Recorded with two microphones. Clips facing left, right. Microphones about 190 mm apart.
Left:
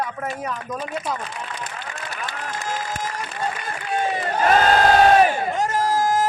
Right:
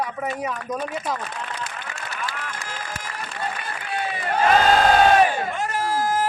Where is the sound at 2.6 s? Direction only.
45° left (ahead or behind).